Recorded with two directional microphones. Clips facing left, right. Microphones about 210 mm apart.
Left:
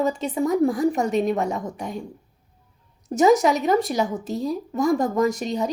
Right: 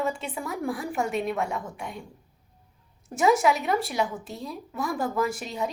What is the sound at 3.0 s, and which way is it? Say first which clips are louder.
A woman's voice: left 5 dB; 40° left (ahead or behind).